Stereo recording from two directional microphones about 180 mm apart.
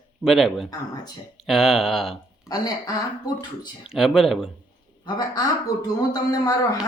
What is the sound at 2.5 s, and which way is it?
Speech, 20° left (ahead or behind).